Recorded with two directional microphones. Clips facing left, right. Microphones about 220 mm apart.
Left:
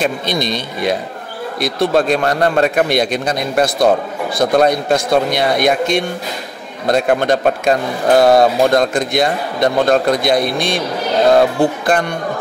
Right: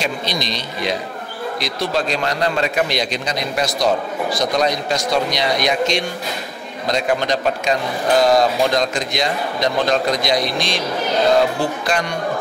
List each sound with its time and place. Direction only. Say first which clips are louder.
0.0 s a man's voice: left 5 dB; 55° left (ahead or behind)